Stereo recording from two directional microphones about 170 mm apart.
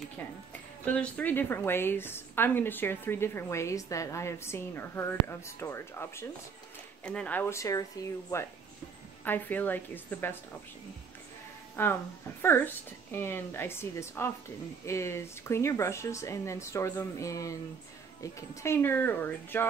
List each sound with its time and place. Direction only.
0.8 s a woman's voice: 10° left (ahead or behind)
9.2 s a woman's voice: 10° left (ahead or behind)
11.7 s a woman's voice: 10° left (ahead or behind)